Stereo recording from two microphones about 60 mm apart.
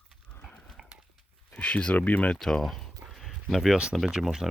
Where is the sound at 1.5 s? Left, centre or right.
Left.